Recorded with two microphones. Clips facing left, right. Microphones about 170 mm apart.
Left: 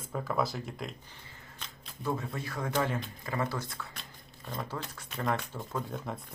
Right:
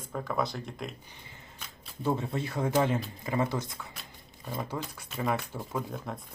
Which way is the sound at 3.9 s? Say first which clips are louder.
Even; 5° right (ahead or behind).